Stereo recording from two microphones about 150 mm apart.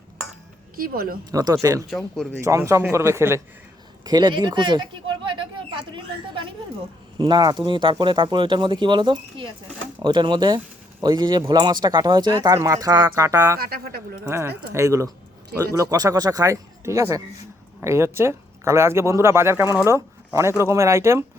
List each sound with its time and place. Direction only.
0.8 s speech: 75° right (ahead or behind)
1.3 s speech: 25° right (ahead or behind)
1.9 s speech: centre (ahead or behind)
2.4 s speech: 20° right (ahead or behind)
4.0 s a sound: 30° right (ahead or behind)
7.2 s speech: 30° right (ahead or behind)
13.6 s speech: 90° right
14.3 s speech: 15° right (ahead or behind)